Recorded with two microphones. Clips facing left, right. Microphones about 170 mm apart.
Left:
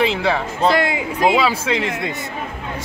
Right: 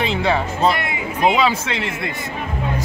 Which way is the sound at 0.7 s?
90° left.